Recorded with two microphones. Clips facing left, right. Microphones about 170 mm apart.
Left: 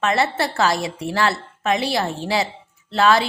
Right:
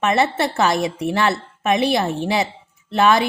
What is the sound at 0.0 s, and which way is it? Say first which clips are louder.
A woman's voice: right 2 dB; 20° right (ahead or behind).